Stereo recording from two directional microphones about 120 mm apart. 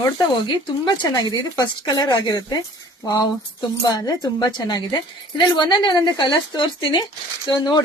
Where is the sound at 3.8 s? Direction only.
35° left (ahead or behind).